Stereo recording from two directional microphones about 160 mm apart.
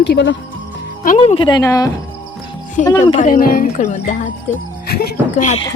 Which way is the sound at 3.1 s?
55° left (ahead or behind).